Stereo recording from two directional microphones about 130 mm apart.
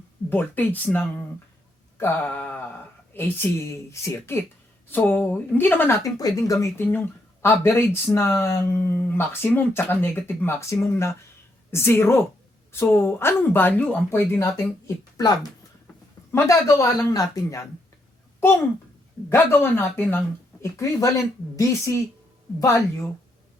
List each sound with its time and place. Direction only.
0.3 s speech: 15° left (ahead or behind)
6.0 s speech: 30° left (ahead or behind)
6.8 s speech: 15° left (ahead or behind)
19.3 s speech: 15° left (ahead or behind)